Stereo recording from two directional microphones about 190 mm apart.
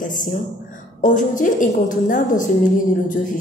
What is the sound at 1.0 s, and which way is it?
A woman's voice, 45° left (ahead or behind).